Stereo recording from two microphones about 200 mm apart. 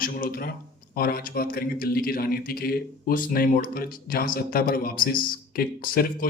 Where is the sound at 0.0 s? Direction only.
45° left (ahead or behind).